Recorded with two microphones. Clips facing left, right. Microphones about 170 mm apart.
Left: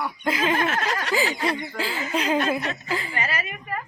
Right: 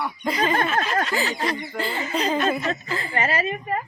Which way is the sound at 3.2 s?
30° right (ahead or behind).